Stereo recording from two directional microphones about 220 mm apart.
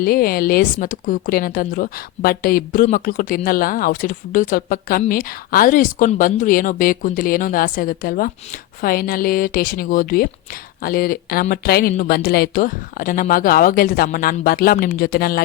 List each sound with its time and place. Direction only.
0.0 s speech: 40° left (ahead or behind)